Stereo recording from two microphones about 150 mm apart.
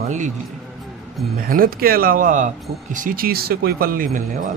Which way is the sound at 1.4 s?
70° right (ahead or behind).